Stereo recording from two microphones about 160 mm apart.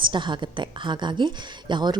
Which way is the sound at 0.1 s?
30° right (ahead or behind).